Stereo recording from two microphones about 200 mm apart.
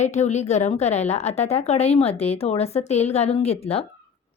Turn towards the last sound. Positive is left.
turn(degrees=30)  # may be behind; listen again after turning